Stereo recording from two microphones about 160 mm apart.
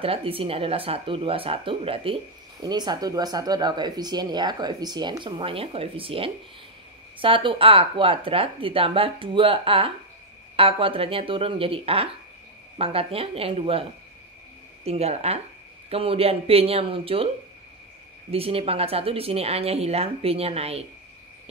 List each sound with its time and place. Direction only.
0.0 s speech: 35° right (ahead or behind)
14.9 s speech: 40° right (ahead or behind)
18.3 s speech: 40° right (ahead or behind)